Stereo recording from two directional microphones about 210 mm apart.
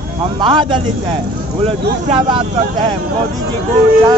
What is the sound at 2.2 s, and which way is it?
Speech, 20° right (ahead or behind).